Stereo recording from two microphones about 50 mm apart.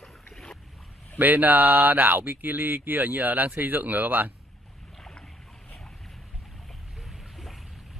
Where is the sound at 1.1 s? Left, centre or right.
Right.